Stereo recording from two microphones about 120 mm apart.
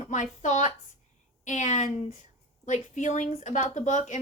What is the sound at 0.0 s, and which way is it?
A woman's voice, 85° left.